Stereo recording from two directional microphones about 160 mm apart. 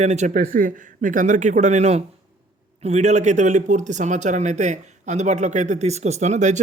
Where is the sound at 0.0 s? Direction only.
45° right (ahead or behind).